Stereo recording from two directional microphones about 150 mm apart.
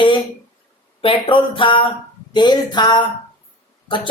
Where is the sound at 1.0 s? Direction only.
35° left (ahead or behind).